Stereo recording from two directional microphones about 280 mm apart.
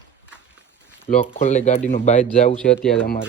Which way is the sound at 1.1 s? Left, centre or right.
Left.